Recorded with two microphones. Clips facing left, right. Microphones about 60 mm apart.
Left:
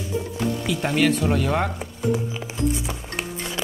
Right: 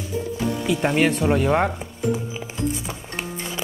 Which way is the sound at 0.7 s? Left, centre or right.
Centre.